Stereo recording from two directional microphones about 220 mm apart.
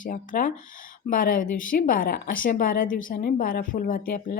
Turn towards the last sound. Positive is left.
turn(degrees=40)  # may be behind; listen again after turning